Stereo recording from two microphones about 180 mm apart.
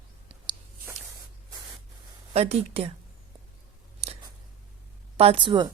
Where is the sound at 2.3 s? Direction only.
35° right (ahead or behind).